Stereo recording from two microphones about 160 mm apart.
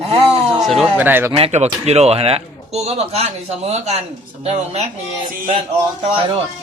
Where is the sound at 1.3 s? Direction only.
40° right (ahead or behind).